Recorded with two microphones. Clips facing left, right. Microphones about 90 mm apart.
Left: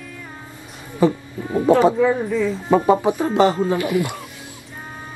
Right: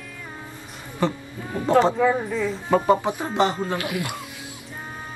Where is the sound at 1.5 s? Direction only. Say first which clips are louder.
Left 4 dB; 10° left (ahead or behind).